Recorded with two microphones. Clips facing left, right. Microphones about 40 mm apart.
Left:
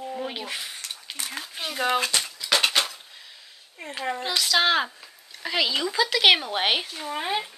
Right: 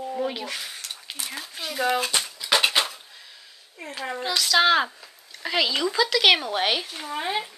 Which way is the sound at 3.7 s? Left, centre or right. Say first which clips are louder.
Left 2 dB; centre.